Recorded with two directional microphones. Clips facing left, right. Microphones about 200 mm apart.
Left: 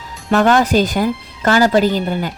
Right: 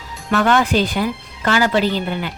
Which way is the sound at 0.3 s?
40° left (ahead or behind).